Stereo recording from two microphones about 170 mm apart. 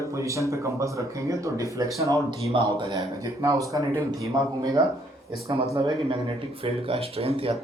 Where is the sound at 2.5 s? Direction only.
30° right (ahead or behind).